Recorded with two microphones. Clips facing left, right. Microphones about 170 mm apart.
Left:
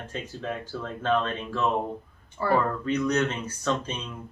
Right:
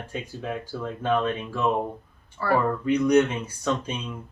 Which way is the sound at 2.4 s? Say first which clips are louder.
Right 1 dB; 20° left (ahead or behind).